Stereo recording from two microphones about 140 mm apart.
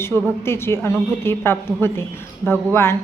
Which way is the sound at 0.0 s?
15° left (ahead or behind).